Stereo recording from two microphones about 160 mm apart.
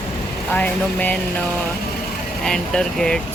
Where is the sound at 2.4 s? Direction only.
5° left (ahead or behind).